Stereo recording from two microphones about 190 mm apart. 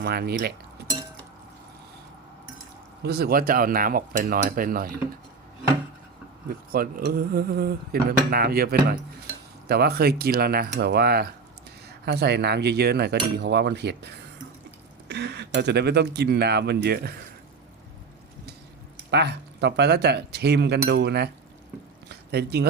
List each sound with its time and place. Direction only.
0.0 s speech: 55° right (ahead or behind)
3.0 s speech: 60° right (ahead or behind)
6.5 s speech: 50° right (ahead or behind)
19.1 s speech: 60° right (ahead or behind)
22.1 s a sound: 60° right (ahead or behind)